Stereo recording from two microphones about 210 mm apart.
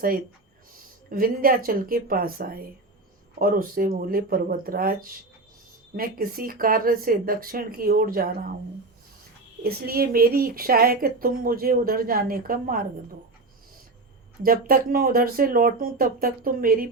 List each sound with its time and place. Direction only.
1.1 s speech: 45° right (ahead or behind)
9.6 s speech: 45° right (ahead or behind)
14.4 s speech: 45° right (ahead or behind)